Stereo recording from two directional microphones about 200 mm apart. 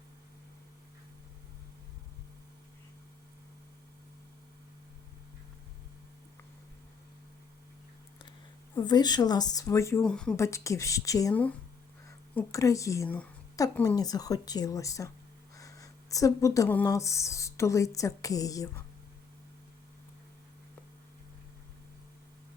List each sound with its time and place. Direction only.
8.7 s speech: 20° left (ahead or behind)
10.0 s a woman's voice: 5° left (ahead or behind)